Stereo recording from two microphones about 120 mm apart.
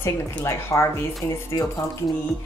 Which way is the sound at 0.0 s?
20° left (ahead or behind).